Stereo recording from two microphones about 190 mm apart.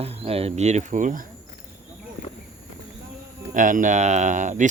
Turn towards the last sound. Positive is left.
turn(degrees=-40)  # may be behind; listen again after turning